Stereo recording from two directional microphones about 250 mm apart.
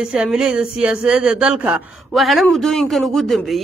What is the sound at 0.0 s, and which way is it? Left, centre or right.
Speech, centre.